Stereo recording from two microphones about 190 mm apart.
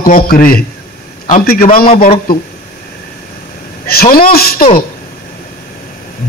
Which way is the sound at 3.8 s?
50° left (ahead or behind).